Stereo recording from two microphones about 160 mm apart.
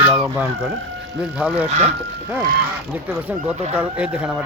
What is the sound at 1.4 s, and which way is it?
Speech, 5° right (ahead or behind).